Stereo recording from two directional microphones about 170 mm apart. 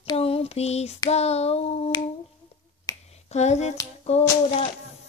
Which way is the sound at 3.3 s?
40° left (ahead or behind).